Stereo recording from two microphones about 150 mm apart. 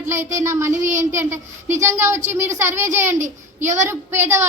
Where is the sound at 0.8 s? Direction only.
55° right (ahead or behind).